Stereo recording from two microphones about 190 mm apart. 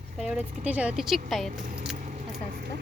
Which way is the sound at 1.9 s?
40° right (ahead or behind).